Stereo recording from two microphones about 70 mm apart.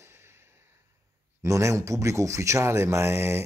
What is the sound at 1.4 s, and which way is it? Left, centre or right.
Speech, right.